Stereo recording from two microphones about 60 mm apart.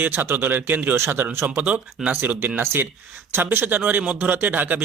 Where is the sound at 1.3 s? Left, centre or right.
Right.